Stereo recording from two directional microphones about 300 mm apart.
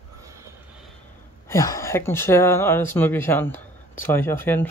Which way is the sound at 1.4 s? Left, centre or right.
Centre.